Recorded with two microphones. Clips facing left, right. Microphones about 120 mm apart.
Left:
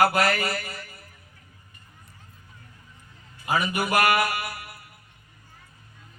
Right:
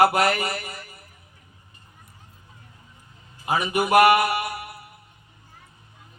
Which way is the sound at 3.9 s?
15° right (ahead or behind).